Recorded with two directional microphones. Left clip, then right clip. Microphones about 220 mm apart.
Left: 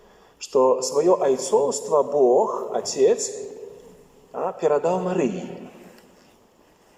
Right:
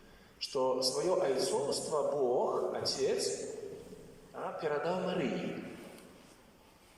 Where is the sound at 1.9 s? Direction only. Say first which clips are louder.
Left 14 dB; 40° left (ahead or behind).